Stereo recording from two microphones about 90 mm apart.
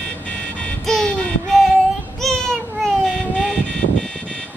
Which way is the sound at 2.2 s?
Centre (ahead or behind).